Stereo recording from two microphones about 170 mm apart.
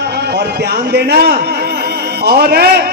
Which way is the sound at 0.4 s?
70° right (ahead or behind).